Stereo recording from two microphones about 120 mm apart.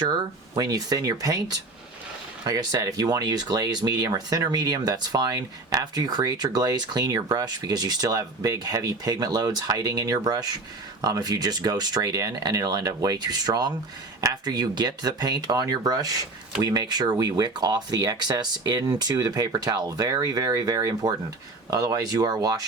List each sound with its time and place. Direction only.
0.0 s speech: 35° right (ahead or behind)